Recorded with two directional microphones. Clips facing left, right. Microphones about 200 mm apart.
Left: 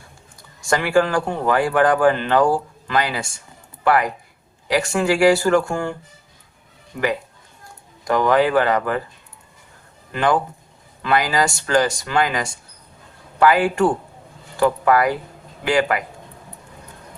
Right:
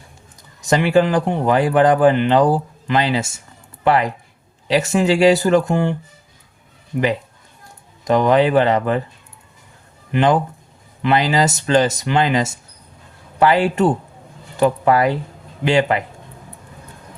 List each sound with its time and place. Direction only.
0.6 s speech: 20° right (ahead or behind)
8.0 s speech: 20° right (ahead or behind)
10.1 s speech: 20° right (ahead or behind)